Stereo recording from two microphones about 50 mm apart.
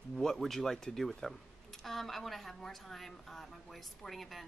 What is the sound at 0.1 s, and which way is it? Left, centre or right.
A woman's voice, centre.